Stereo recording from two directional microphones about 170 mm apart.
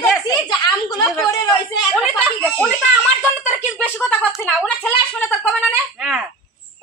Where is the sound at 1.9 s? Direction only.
Centre (ahead or behind).